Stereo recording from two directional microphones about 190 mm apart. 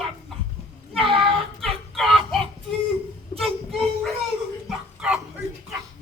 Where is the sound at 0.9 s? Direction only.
30° right (ahead or behind).